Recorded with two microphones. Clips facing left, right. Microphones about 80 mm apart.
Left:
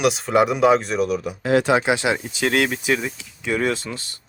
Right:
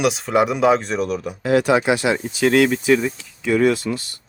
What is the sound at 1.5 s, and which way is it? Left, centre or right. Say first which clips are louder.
Speech: right 1 dB; left.